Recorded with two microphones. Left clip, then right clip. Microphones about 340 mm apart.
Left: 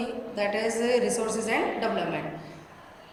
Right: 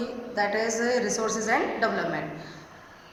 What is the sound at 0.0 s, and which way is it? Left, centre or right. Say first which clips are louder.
A woman's voice: right 1 dB; centre.